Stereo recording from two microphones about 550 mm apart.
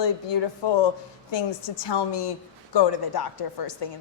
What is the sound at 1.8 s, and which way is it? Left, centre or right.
Speech, left.